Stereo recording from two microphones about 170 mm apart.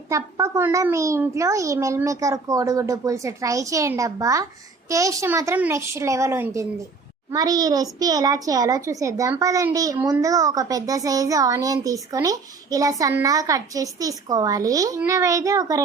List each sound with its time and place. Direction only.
0.1 s a child's voice: 20° right (ahead or behind)